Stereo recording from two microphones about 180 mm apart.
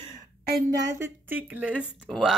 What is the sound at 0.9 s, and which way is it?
Speech, 15° right (ahead or behind).